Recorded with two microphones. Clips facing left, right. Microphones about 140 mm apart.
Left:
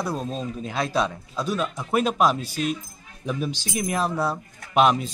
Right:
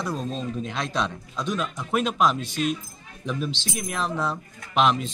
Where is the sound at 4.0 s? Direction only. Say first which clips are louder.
Right 1 dB; 10° left (ahead or behind).